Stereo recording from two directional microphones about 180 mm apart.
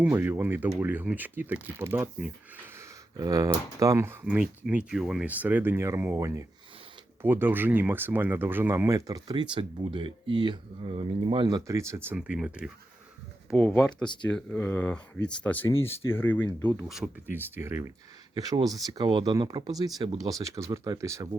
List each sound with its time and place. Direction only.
0.0 s speech: 10° right (ahead or behind); by 16.7 s 10° left (ahead or behind)
16.9 s speech: 5° right (ahead or behind)